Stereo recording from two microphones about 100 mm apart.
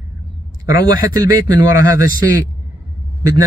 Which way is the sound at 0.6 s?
40° right (ahead or behind).